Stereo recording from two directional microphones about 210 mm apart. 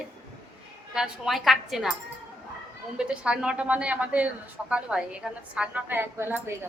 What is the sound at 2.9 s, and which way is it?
A woman's voice, 5° right (ahead or behind).